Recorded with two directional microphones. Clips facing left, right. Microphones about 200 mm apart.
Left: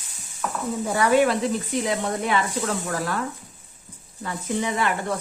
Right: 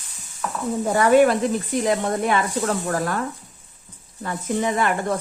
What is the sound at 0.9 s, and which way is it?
Speech, 45° right (ahead or behind).